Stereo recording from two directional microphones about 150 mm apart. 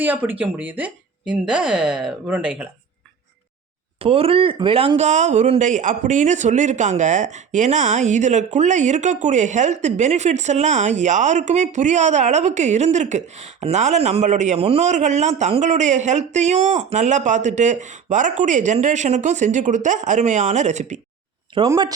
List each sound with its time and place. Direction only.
0.0 s speech: 10° right (ahead or behind)
4.0 s speech: 40° right (ahead or behind)
21.6 s speech: 35° right (ahead or behind)